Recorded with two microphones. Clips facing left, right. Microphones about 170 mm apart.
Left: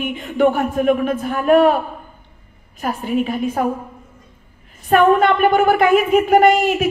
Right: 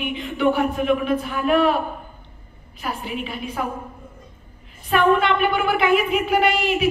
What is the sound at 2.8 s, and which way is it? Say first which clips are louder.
Speech: left 8 dB; 45° left (ahead or behind).